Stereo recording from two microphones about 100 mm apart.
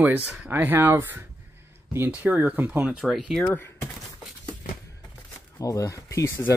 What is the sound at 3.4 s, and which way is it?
Speech, 20° left (ahead or behind).